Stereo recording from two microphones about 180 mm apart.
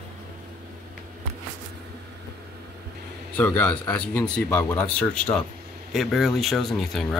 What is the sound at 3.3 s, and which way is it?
Speech, 5° left (ahead or behind).